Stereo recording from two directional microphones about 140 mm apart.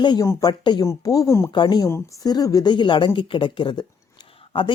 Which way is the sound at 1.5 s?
35° left (ahead or behind).